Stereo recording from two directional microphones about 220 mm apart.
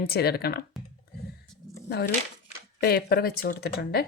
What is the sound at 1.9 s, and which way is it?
A woman's voice, 45° left (ahead or behind).